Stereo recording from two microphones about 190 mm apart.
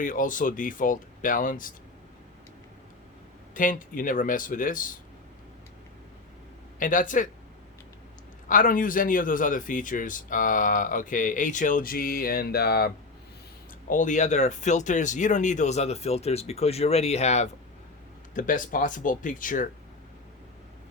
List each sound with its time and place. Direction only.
0.0 s speech: 45° left (ahead or behind)
3.5 s speech: 45° left (ahead or behind)
6.7 s speech: 45° left (ahead or behind)
8.4 s speech: 45° left (ahead or behind)
13.9 s speech: 40° left (ahead or behind)